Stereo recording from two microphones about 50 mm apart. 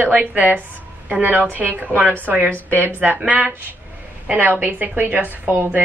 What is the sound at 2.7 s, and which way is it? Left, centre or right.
Speech, right.